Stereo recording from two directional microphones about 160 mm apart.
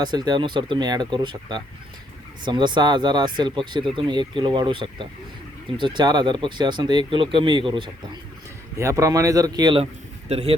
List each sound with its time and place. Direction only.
0.0 s speech: 25° right (ahead or behind)
8.8 s speech: 20° right (ahead or behind)
9.8 s speech: 40° right (ahead or behind)